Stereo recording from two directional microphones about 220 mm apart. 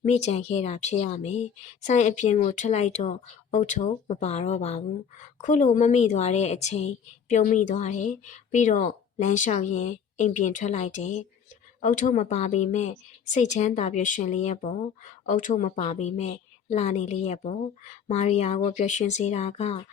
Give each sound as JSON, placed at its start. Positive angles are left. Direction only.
{"t": 0.0, "sound": "speech", "side_deg": 30}